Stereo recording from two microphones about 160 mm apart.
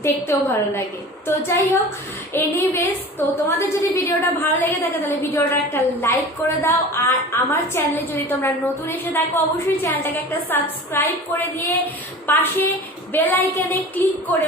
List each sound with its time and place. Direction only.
0.0 s a woman's voice: 15° left (ahead or behind)